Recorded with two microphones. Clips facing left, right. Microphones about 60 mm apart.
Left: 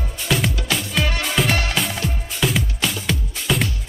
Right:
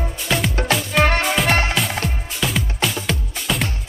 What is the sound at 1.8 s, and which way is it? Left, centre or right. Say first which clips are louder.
Music: right 1 dB; centre.